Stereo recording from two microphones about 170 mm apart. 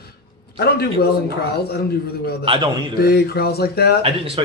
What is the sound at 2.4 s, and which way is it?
Speech, 30° right (ahead or behind).